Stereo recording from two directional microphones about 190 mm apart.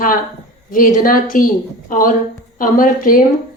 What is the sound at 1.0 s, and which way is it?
Speech, 45° left (ahead or behind).